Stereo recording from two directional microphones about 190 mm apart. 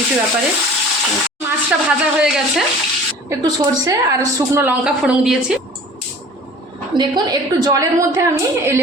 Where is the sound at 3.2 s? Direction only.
20° right (ahead or behind).